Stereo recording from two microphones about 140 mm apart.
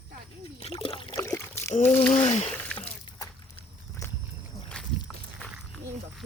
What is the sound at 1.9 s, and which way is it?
Speech, 15° left (ahead or behind).